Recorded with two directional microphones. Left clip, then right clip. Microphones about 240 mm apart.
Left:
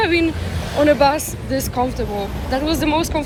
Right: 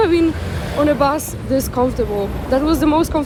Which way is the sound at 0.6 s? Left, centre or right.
Right.